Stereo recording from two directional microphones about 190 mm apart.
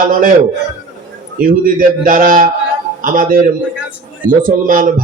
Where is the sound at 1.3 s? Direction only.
45° right (ahead or behind).